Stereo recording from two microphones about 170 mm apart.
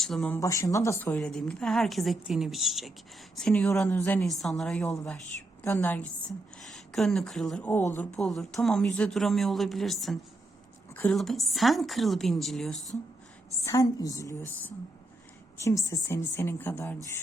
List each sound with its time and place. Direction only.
0.0 s speech: 5° left (ahead or behind)
0.3 s a woman's voice: 20° left (ahead or behind); by 13.0 s centre (ahead or behind)
13.7 s a woman's voice: 20° left (ahead or behind)
15.6 s a woman's voice: 20° left (ahead or behind)